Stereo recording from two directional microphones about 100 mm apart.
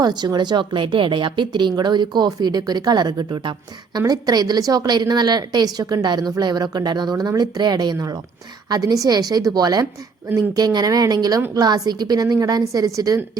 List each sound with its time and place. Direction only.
0.0 s a woman's voice: 45° right (ahead or behind)